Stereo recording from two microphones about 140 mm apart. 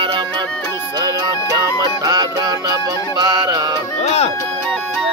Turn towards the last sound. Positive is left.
turn(degrees=50)  # may be behind; listen again after turning